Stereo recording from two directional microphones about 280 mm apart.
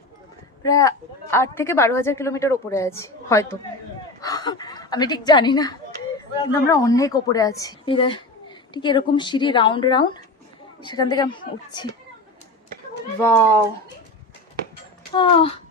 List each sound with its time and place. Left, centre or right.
0.6 s a woman's voice: centre
13.2 s a woman's voice: centre
15.1 s a woman's voice: centre